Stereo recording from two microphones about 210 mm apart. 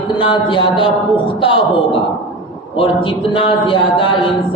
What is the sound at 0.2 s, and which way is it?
Speech, 25° left (ahead or behind).